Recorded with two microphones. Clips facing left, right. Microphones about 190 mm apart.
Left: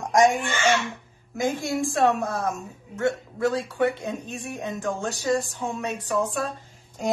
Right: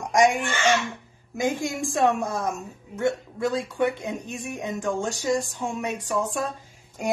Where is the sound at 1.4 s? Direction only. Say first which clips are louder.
Left 1 dB; 15° right (ahead or behind).